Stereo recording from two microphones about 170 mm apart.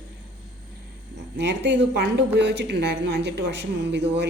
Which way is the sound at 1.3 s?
90° right.